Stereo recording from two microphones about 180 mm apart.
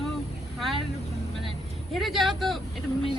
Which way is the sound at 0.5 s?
Centre (ahead or behind).